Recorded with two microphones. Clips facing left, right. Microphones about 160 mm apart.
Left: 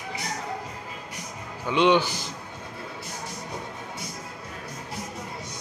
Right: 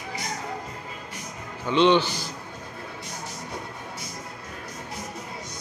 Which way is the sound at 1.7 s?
10° left (ahead or behind).